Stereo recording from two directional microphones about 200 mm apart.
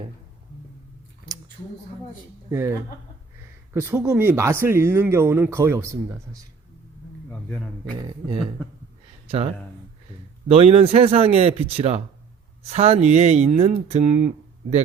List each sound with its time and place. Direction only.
2.5 s speech: 10° right (ahead or behind)
3.8 s speech: 10° right (ahead or behind)
10.5 s speech: 30° right (ahead or behind)